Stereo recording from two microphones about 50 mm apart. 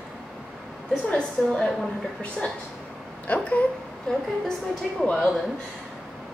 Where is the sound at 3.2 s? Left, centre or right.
Left.